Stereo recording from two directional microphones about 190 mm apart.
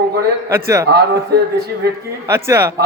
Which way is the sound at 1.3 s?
60° right (ahead or behind).